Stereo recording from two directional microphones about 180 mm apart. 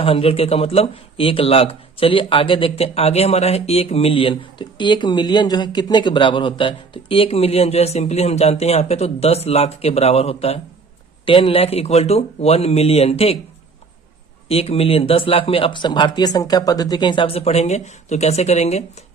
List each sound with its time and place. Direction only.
0.0 s speech: 30° left (ahead or behind)
14.4 s speech: 35° left (ahead or behind)